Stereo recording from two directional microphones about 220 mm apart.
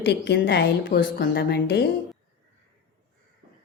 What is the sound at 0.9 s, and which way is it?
Speech, 40° left (ahead or behind).